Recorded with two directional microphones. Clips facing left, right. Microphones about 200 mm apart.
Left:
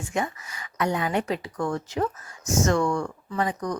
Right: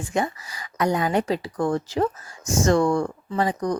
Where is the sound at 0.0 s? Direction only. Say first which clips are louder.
Right 3 dB; 35° right (ahead or behind).